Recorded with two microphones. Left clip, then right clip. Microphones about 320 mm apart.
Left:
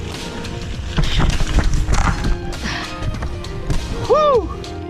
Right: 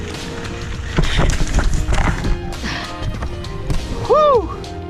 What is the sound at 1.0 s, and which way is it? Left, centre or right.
Vehicle, centre.